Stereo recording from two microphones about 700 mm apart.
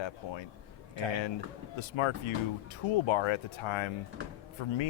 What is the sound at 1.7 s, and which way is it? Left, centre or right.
Speech, left.